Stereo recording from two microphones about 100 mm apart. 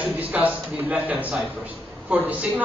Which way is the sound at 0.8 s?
15° right (ahead or behind).